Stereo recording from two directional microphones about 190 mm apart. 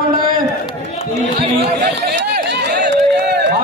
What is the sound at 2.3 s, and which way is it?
Run, 60° right (ahead or behind).